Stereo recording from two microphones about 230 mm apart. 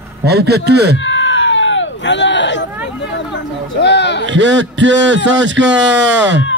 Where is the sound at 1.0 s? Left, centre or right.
Left.